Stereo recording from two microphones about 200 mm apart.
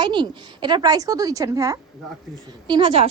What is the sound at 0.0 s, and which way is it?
A woman's voice, 25° right (ahead or behind).